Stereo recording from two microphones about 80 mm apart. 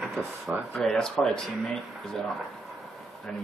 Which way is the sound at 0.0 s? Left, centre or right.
Centre.